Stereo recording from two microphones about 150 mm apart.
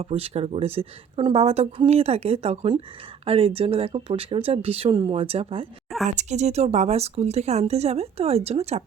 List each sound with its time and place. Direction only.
0.0 s speech: 40° right (ahead or behind)